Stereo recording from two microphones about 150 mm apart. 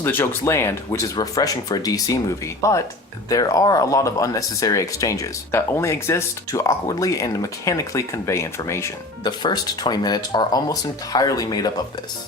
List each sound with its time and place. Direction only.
0.0 s speech: 15° left (ahead or behind)
9.2 s speech: 30° left (ahead or behind)